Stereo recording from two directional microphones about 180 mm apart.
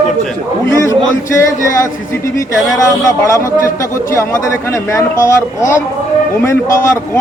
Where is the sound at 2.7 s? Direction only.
15° left (ahead or behind).